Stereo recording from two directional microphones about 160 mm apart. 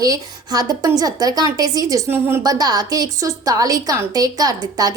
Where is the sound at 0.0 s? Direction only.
25° right (ahead or behind).